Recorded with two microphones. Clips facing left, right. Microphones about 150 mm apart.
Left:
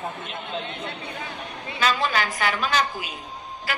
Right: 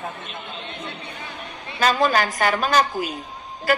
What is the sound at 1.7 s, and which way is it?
A woman's voice, 45° right (ahead or behind).